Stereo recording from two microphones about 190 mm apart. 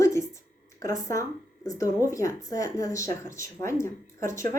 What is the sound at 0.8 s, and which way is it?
Speech, 15° left (ahead or behind).